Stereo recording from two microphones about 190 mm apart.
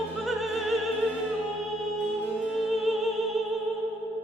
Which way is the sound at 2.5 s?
Centre (ahead or behind).